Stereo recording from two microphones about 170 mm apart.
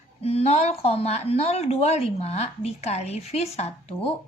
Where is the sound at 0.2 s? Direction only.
35° left (ahead or behind).